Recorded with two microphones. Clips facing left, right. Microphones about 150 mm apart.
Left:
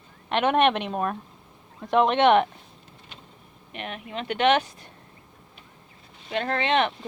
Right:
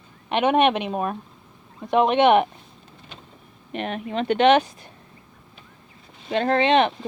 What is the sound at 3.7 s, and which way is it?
Speech, 35° right (ahead or behind).